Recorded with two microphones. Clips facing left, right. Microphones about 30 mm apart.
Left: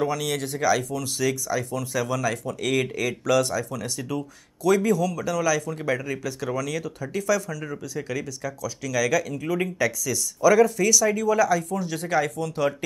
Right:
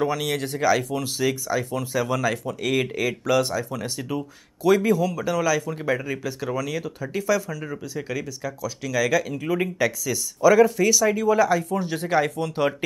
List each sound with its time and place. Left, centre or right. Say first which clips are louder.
0.0 s speech: right 1 dB; centre
0.8 s speech: right 1 dB; right; by 8.5 s centre
8.6 s speech: right 1 dB; right